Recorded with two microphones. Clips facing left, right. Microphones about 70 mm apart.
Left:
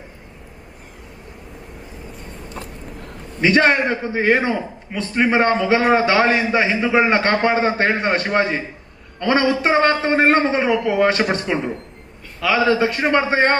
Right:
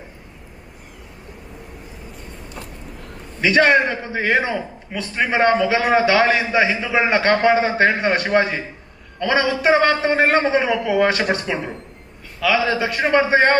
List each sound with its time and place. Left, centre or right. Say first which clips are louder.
3.4 s a man's voice: even; left